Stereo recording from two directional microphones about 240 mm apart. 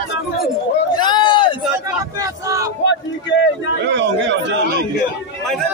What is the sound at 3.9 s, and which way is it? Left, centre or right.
Chatter, right.